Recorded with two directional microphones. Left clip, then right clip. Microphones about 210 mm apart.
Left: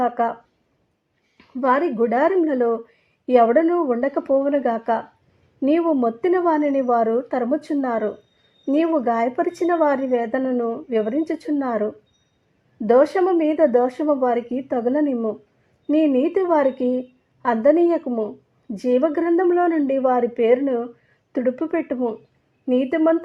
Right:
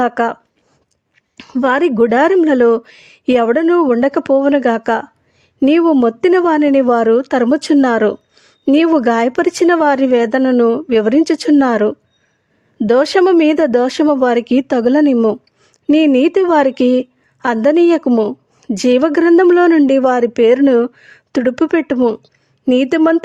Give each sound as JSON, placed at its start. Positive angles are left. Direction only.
{"t": 0.0, "sound": "speech", "side_deg": -50}
{"t": 1.4, "sound": "speech", "side_deg": -55}
{"t": 16.8, "sound": "speech", "side_deg": -60}